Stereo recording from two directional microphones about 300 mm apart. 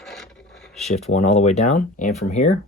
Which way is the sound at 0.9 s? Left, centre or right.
Left.